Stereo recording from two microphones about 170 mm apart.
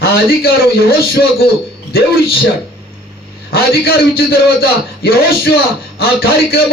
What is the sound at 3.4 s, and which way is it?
A man's voice, 65° left (ahead or behind).